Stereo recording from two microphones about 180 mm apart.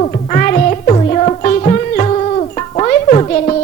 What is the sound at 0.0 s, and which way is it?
Music, 45° left (ahead or behind).